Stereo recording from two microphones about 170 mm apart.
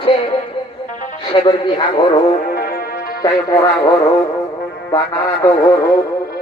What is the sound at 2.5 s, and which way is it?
Music, 60° left (ahead or behind).